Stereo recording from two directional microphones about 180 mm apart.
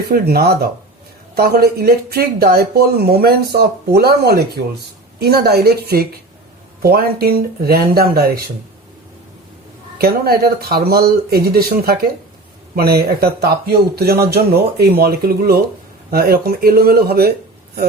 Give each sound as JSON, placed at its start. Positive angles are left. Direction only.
{"t": 0.1, "sound": "speech", "side_deg": -60}
{"t": 10.0, "sound": "speech", "side_deg": -60}